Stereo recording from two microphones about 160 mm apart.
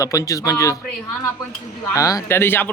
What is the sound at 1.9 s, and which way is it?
Speech, 20° left (ahead or behind).